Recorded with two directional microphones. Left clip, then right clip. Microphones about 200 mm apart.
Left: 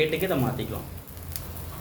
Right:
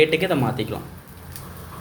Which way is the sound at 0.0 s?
25° right (ahead or behind).